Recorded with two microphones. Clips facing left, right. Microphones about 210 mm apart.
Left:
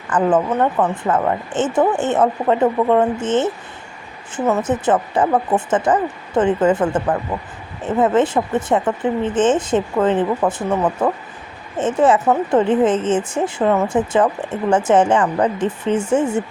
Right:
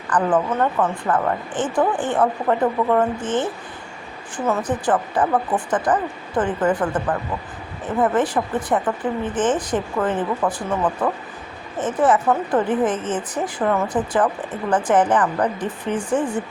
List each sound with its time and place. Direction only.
0.1 s speech: 20° left (ahead or behind)